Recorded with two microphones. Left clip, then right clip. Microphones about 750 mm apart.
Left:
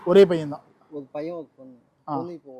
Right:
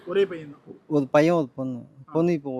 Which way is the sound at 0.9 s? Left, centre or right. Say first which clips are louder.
Right 13 dB; right.